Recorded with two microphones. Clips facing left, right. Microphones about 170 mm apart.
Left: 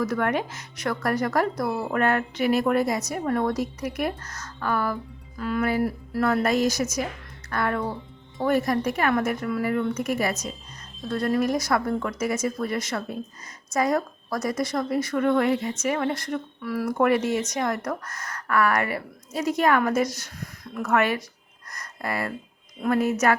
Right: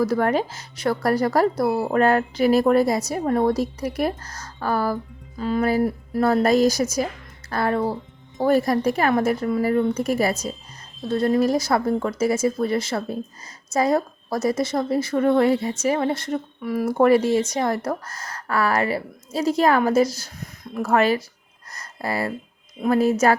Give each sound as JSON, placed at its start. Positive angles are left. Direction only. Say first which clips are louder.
{"t": 0.0, "sound": "speech", "louder": "right 4 dB", "side_deg": -30}
{"t": 21.7, "sound": "a sound", "louder": "right 3 dB", "side_deg": -30}
{"t": 22.8, "sound": "speech", "louder": "right 4 dB", "side_deg": -30}